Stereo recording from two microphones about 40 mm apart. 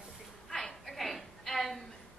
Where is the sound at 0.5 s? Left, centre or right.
Centre.